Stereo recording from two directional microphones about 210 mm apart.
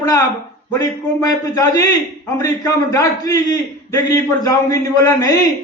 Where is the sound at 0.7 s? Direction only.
15° left (ahead or behind).